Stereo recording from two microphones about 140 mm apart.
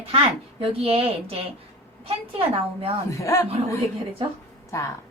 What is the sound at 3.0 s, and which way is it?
Speech, 20° left (ahead or behind).